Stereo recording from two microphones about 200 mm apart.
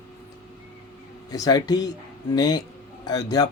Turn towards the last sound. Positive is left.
turn(degrees=20)  # may be behind; listen again after turning